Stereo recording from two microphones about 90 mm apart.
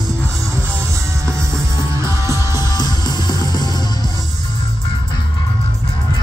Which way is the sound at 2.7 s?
50° left (ahead or behind).